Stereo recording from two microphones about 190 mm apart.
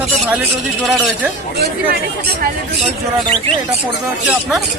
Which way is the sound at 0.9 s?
Centre (ahead or behind).